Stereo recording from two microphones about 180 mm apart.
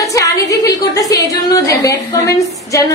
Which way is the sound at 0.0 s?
20° left (ahead or behind).